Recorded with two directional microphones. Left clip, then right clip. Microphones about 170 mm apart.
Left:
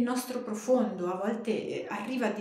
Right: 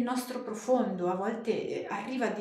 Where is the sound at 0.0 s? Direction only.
20° left (ahead or behind).